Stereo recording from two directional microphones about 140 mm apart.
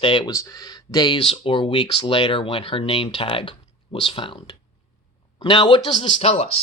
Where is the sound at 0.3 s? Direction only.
25° left (ahead or behind).